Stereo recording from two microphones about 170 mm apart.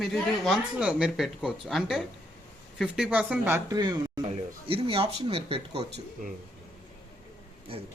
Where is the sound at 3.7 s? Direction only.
25° right (ahead or behind).